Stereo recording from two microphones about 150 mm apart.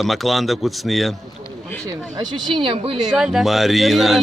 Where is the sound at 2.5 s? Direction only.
35° right (ahead or behind).